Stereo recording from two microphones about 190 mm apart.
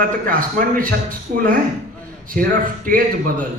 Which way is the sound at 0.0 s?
45° right (ahead or behind).